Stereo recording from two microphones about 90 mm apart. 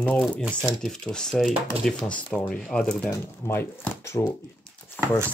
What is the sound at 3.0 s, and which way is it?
Speech, 30° left (ahead or behind).